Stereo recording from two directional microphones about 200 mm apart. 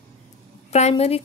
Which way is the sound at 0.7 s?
35° left (ahead or behind).